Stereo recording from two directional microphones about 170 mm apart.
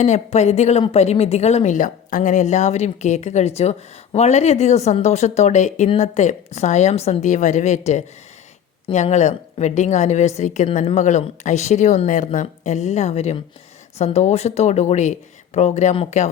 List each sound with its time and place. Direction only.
0.0 s a woman's voice: 40° left (ahead or behind)